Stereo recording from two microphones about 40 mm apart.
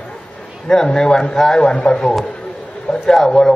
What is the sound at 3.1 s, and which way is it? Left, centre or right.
Speech, centre.